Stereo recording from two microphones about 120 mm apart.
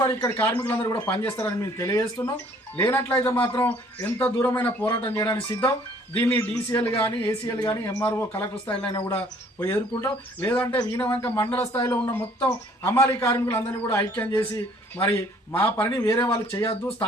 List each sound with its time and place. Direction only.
0.0 s a man's voice: 25° left (ahead or behind)
4.9 s speech: 30° left (ahead or behind)
8.6 s a man's voice: 10° left (ahead or behind)
9.6 s a man's voice: 20° left (ahead or behind)